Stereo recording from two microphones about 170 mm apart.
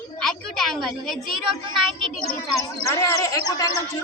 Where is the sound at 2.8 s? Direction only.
20° left (ahead or behind).